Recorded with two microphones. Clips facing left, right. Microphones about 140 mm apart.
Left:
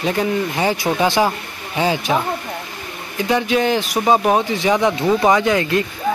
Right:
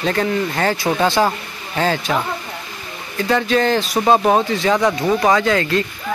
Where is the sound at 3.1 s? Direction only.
15° left (ahead or behind).